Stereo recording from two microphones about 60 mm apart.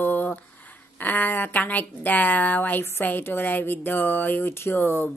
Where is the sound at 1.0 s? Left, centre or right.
Left.